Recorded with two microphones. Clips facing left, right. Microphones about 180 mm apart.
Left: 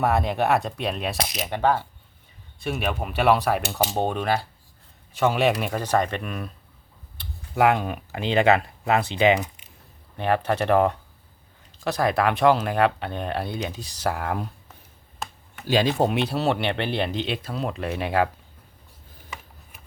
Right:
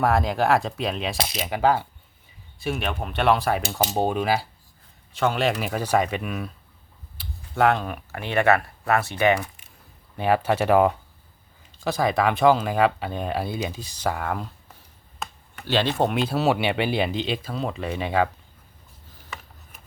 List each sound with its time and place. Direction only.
0.0 s speech: centre (ahead or behind)
7.5 s speech: 10° left (ahead or behind)
10.2 s speech: 5° right (ahead or behind)
15.6 s speech: 10° left (ahead or behind)